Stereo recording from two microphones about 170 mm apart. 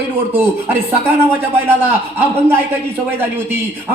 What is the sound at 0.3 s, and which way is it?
A man's voice, 15° right (ahead or behind).